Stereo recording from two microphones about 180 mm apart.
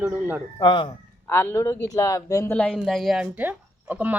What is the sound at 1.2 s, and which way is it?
Speech, 15° left (ahead or behind).